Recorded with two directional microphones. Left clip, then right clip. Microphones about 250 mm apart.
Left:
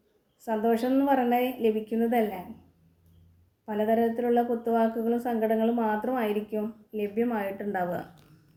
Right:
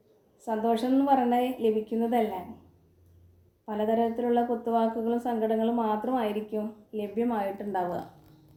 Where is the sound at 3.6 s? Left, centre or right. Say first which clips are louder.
Left 1 dB; centre.